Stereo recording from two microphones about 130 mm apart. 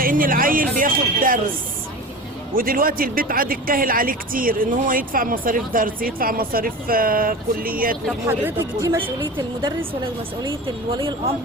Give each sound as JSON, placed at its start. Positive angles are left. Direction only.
{"t": 0.0, "sound": "speech", "side_deg": -90}
{"t": 2.6, "sound": "speech", "side_deg": -90}
{"t": 8.3, "sound": "speech", "side_deg": -20}